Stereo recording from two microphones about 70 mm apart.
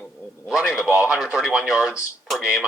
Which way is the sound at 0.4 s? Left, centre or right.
Centre.